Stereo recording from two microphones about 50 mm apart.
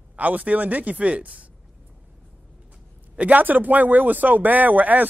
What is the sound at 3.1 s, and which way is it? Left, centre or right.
Speech, right.